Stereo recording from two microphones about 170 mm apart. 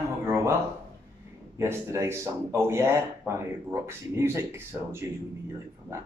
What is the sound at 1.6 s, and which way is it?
Speech, 15° right (ahead or behind).